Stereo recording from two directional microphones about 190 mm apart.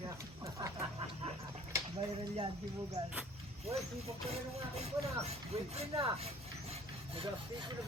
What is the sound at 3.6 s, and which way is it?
Speech, 35° right (ahead or behind).